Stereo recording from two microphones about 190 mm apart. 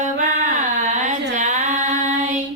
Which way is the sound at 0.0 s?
40° right (ahead or behind).